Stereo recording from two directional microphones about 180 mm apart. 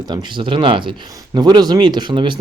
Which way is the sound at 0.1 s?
25° right (ahead or behind).